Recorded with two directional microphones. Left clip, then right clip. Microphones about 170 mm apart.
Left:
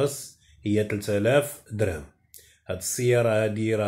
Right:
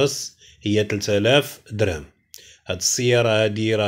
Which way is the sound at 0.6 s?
25° right (ahead or behind).